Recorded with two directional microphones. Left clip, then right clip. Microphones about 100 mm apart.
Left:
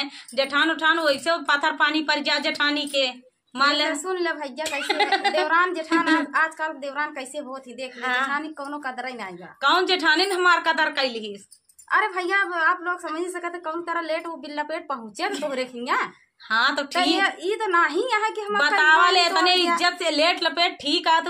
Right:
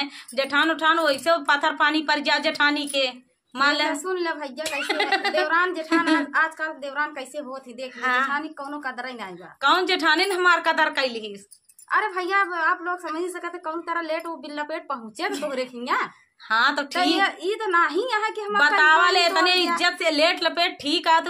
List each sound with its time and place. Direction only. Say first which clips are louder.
0.0 s a woman's voice: left 1 dB; 45° right (ahead or behind)
3.9 s a woman's voice: left 1 dB; 15° left (ahead or behind)
4.6 s a woman's voice: left 1 dB; 40° right (ahead or behind)
5.5 s a woman's voice: left 1 dB; 15° left (ahead or behind)
8.0 s a woman's voice: right 2 dB; 45° right (ahead or behind)
8.3 s a woman's voice: even; 15° left (ahead or behind)
9.6 s a woman's voice: even; 45° right (ahead or behind)
11.9 s a woman's voice: left 1 dB; 15° left (ahead or behind)
16.4 s a woman's voice: right 1 dB; 45° right (ahead or behind)
17.1 s a woman's voice: even; 15° left (ahead or behind)
18.8 s a woman's voice: left 2 dB; 40° right (ahead or behind)